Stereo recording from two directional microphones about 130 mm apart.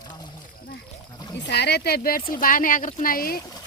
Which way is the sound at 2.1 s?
90° left.